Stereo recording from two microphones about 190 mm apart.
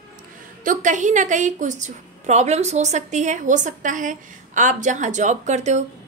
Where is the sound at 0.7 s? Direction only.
40° right (ahead or behind).